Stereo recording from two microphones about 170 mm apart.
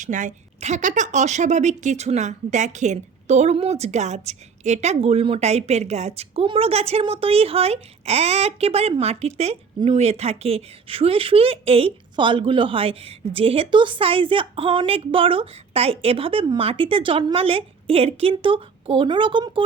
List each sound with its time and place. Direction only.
0.0 s a woman's voice: 45° right (ahead or behind); by 19.6 s 30° right (ahead or behind)